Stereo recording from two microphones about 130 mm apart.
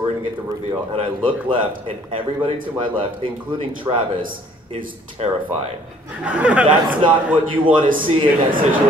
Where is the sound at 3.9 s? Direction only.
35° right (ahead or behind).